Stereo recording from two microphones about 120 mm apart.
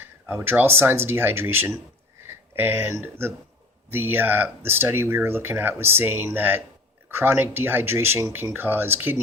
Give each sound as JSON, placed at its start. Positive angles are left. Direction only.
{"t": 0.0, "sound": "speech", "side_deg": -20}